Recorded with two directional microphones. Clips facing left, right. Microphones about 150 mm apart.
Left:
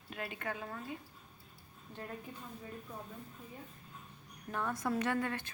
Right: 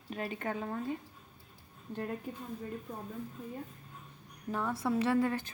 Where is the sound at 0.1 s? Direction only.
25° right (ahead or behind).